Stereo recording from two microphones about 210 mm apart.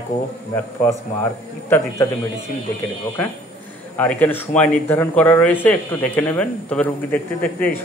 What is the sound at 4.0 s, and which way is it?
Speech, 10° left (ahead or behind).